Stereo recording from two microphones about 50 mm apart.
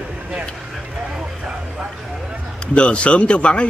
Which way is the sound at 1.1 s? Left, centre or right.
Centre.